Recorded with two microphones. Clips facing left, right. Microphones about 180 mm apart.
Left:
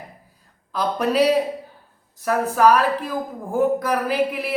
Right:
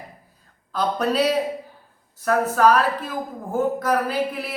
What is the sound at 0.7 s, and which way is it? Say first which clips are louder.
A man's voice: left 1 dB; 10° left (ahead or behind).